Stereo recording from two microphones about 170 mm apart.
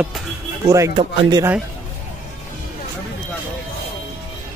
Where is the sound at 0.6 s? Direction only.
20° right (ahead or behind).